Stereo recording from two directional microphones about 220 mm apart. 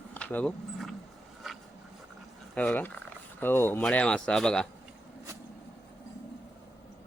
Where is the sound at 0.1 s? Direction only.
10° left (ahead or behind).